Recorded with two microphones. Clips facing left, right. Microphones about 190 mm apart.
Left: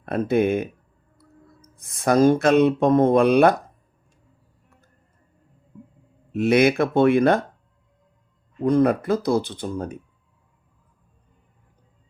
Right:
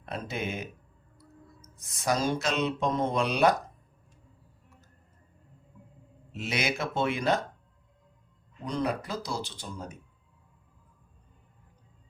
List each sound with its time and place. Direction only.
0.0 s speech: 55° left (ahead or behind)
6.3 s speech: 55° left (ahead or behind)
8.6 s speech: 55° left (ahead or behind)